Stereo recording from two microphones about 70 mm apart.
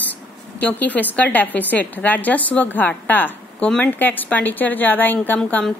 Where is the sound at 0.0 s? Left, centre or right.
Left.